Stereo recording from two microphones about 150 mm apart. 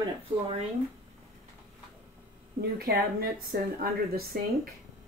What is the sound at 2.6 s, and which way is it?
A woman's voice, 90° right.